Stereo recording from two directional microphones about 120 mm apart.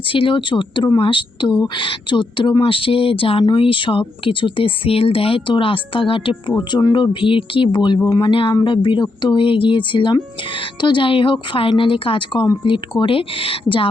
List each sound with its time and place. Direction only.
0.1 s speech: 45° left (ahead or behind)